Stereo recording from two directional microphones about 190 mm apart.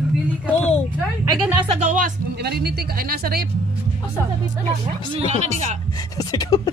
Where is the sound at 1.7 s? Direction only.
40° right (ahead or behind).